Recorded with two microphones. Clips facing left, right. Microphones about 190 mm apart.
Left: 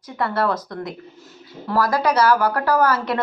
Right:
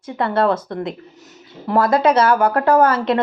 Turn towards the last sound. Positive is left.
turn(degrees=-25)  # may be behind; listen again after turning